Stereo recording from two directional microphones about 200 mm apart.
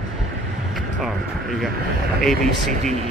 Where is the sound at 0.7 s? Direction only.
Centre (ahead or behind).